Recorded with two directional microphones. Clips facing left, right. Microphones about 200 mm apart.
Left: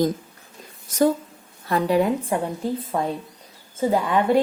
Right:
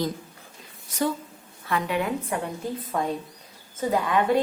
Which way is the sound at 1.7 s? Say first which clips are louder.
Left 6 dB; 35° left (ahead or behind).